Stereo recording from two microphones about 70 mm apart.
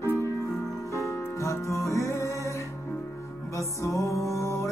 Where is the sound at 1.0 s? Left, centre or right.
Left.